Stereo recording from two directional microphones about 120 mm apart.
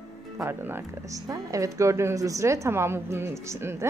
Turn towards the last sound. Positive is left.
turn(degrees=-20)  # may be behind; listen again after turning